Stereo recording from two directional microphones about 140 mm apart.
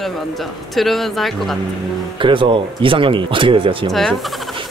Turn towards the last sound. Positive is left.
turn(degrees=5)  # may be behind; listen again after turning